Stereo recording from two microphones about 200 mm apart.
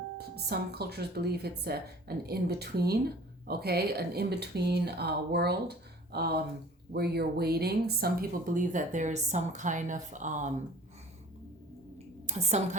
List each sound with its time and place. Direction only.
0.2 s speech: 55° right (ahead or behind)
12.2 s a woman's voice: 35° right (ahead or behind)